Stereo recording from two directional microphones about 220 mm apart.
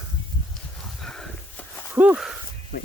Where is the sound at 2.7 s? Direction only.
50° left (ahead or behind).